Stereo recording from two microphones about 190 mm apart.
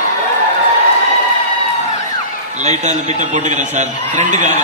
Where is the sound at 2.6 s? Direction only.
35° right (ahead or behind).